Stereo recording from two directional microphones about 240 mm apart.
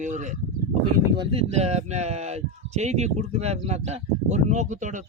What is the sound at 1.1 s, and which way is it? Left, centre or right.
Speech, right.